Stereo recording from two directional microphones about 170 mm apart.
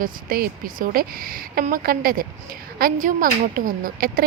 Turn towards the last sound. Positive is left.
turn(degrees=-55)  # may be behind; listen again after turning